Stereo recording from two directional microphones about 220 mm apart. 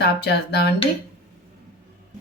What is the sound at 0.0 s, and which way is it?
Speech, 45° left (ahead or behind).